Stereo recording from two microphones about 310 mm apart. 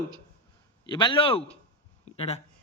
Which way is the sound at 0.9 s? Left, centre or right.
Centre.